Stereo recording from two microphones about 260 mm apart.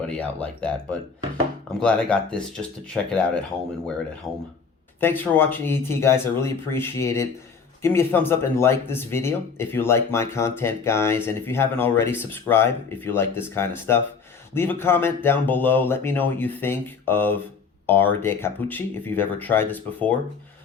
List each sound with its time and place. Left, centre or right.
0.2 s speech: centre
4.3 s speech: centre